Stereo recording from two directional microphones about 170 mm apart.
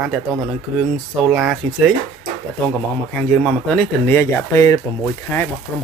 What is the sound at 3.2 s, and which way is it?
Speech, centre (ahead or behind).